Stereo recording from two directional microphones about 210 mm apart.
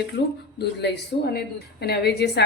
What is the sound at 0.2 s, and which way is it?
A woman's voice, 50° left (ahead or behind).